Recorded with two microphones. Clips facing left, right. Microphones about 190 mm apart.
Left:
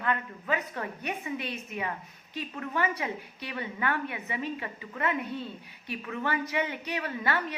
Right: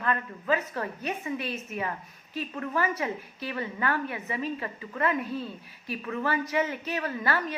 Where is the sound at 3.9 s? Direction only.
35° right (ahead or behind).